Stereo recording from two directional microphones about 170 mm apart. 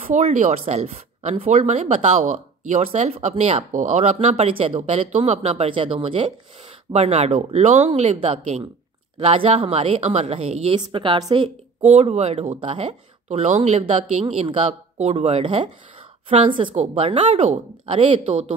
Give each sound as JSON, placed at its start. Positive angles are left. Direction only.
{"t": 0.0, "sound": "a woman's voice", "side_deg": -45}